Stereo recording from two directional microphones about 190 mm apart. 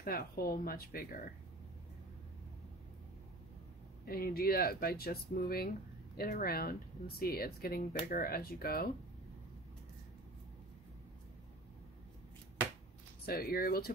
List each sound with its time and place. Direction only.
0.0 s speech: 50° left (ahead or behind)
4.0 s speech: 50° left (ahead or behind)
13.2 s speech: 55° left (ahead or behind)